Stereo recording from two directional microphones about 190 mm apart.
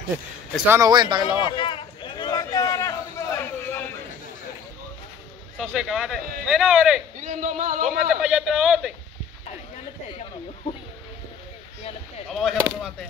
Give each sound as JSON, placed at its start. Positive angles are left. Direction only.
{"t": 0.7, "sound": "speech", "side_deg": -20}
{"t": 1.4, "sound": "a sound", "side_deg": 25}
{"t": 5.6, "sound": "speech", "side_deg": 0}
{"t": 7.2, "sound": "speech", "side_deg": -40}
{"t": 8.1, "sound": "speech", "side_deg": -5}
{"t": 12.3, "sound": "speech", "side_deg": 0}